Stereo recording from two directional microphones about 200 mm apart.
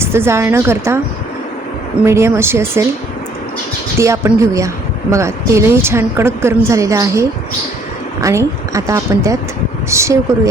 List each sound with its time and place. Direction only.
0.0 s a woman's voice: 10° right (ahead or behind)
2.0 s a woman's voice: 15° right (ahead or behind)
3.9 s a woman's voice: 15° right (ahead or behind)